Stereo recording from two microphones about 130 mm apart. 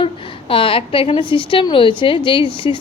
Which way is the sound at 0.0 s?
40° left (ahead or behind).